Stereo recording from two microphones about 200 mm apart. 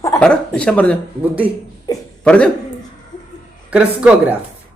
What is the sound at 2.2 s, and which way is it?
Speech, 5° left (ahead or behind).